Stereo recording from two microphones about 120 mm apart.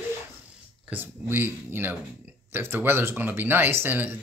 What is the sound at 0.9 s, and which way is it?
Speech, 20° right (ahead or behind).